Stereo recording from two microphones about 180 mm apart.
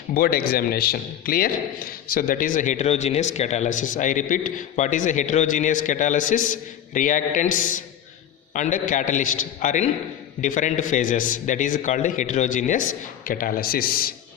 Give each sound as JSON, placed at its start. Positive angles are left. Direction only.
{"t": 0.1, "sound": "a man's voice", "side_deg": 55}